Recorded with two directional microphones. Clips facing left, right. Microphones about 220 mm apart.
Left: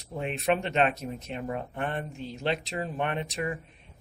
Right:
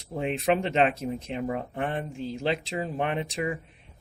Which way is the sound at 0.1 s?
30° right (ahead or behind).